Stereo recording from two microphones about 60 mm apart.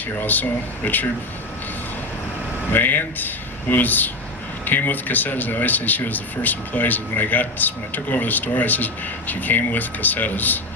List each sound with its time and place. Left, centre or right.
0.2 s speech: left
2.7 s speech: left